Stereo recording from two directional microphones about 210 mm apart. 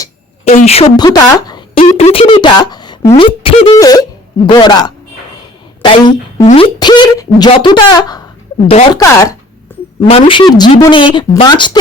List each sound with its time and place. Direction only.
0.4 s speech: 30° left (ahead or behind)
1.8 s a woman's voice: 30° left (ahead or behind)
6.7 s a sound: 20° left (ahead or behind)
8.6 s a woman's voice: 30° left (ahead or behind)
10.0 s a woman's voice: 25° left (ahead or behind)